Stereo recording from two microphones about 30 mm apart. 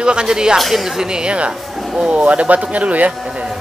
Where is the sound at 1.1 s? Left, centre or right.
Right.